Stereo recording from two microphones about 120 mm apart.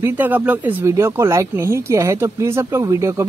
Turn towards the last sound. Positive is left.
turn(degrees=-25)  # may be behind; listen again after turning